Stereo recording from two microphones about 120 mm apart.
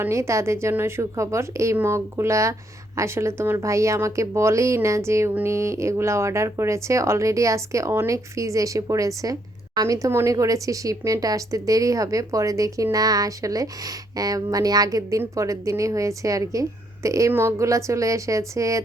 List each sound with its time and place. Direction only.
0.0 s a woman's voice: 25° right (ahead or behind)